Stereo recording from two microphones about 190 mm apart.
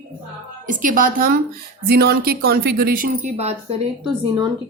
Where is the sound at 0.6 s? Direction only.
45° right (ahead or behind).